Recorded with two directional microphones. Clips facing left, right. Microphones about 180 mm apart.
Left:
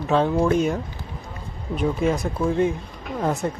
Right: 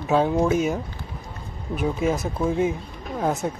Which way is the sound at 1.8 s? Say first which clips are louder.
Left 1 dB; centre (ahead or behind).